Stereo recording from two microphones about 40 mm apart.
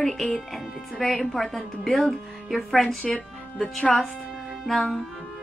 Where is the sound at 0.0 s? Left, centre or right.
Centre.